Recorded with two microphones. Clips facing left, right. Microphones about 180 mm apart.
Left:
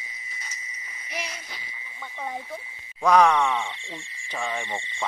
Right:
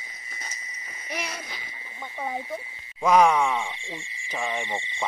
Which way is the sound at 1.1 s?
60° right (ahead or behind).